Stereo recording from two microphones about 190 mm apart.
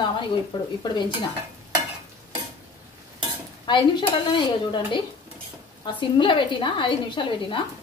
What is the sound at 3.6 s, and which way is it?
Speech, 25° left (ahead or behind).